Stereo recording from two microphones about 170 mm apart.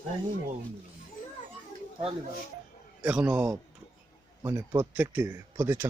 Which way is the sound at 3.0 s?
10° right (ahead or behind).